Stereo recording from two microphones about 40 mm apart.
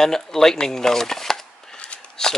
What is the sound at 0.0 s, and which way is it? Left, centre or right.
Speech, centre.